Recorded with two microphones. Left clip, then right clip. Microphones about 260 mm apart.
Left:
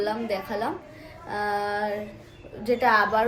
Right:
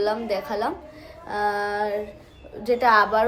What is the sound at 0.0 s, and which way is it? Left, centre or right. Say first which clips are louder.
A woman's voice: right 3 dB; centre.